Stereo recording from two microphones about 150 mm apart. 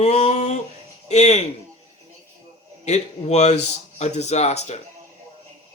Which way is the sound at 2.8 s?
50° left (ahead or behind).